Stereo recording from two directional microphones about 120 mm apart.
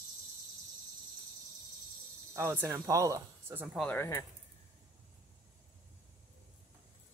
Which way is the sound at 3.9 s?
20° left (ahead or behind).